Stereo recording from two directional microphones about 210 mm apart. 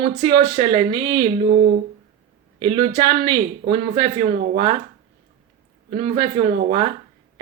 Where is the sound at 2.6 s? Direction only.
20° right (ahead or behind).